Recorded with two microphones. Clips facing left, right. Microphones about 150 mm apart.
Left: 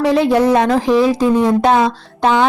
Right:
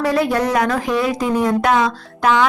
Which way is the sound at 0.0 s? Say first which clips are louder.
Left 5 dB; 25° left (ahead or behind).